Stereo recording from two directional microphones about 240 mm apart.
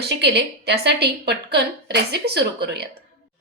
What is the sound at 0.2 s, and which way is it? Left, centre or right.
A woman's voice, right.